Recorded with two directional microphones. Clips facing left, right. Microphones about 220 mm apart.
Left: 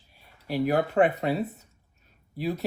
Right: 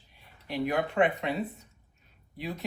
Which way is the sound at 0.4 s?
40° left (ahead or behind).